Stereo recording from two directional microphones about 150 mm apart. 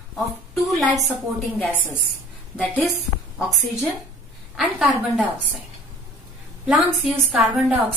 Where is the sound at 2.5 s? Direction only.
5° left (ahead or behind).